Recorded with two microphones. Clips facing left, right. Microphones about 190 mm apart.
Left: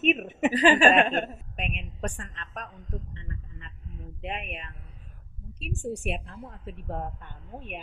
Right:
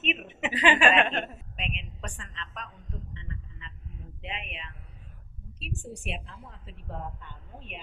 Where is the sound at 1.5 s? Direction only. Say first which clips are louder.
Left 1 dB; 55° left (ahead or behind).